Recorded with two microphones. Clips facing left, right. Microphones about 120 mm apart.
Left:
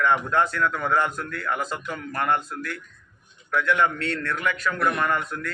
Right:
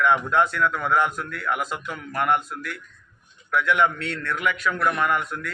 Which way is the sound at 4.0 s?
40° left (ahead or behind).